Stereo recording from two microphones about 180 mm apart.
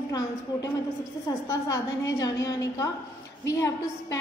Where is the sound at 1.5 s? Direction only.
20° left (ahead or behind).